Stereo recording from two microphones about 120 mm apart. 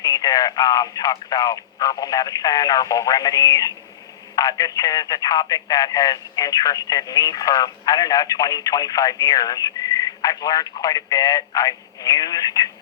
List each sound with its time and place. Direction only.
0.0 s speech: 30° left (ahead or behind)